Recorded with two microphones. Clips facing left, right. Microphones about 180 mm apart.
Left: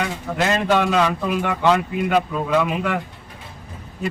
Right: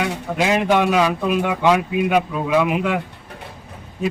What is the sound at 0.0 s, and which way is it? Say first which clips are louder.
Speech: right 2 dB; 10° right (ahead or behind).